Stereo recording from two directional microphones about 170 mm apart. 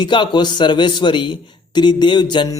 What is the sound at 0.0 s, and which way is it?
A man's voice, 25° left (ahead or behind).